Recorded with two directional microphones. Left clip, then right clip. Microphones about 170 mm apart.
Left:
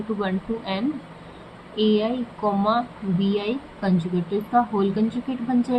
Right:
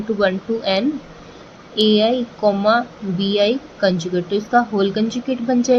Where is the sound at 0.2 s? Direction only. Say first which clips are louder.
Right 9 dB; 50° right (ahead or behind).